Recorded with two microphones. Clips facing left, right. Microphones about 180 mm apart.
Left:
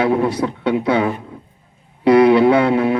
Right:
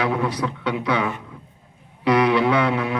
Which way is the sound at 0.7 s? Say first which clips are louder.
Left 8 dB; 50° left (ahead or behind).